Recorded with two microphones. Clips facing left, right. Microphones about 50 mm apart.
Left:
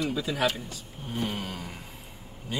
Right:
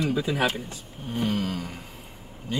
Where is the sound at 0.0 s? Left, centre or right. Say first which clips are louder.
Right 3 dB; right.